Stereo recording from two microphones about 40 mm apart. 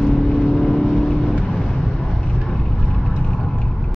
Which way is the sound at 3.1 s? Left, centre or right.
Left.